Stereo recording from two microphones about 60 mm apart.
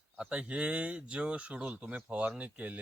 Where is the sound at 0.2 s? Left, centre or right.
Centre.